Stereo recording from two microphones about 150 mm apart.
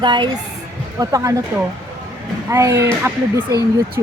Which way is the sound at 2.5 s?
20° right (ahead or behind).